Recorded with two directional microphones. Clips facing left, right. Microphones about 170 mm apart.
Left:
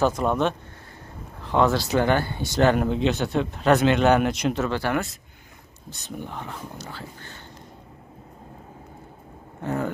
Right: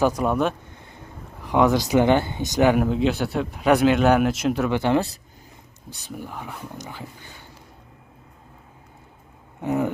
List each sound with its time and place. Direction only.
0.0 s speech: 10° right (ahead or behind)
4.6 s speech: 20° right (ahead or behind)
5.9 s speech: 10° right (ahead or behind)
9.6 s speech: 15° right (ahead or behind)